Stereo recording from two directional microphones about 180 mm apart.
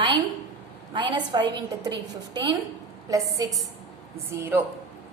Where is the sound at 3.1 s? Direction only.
20° right (ahead or behind).